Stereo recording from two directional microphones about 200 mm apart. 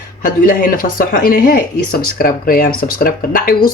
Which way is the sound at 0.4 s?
45° left (ahead or behind).